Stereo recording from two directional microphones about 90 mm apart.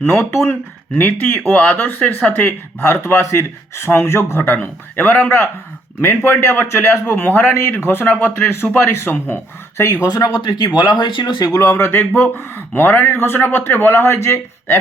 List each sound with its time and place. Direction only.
0.1 s a man's voice: 30° left (ahead or behind)
2.8 s a man's voice: 30° left (ahead or behind)
10.0 s speech: 45° left (ahead or behind)
11.6 s a man's voice: 25° left (ahead or behind)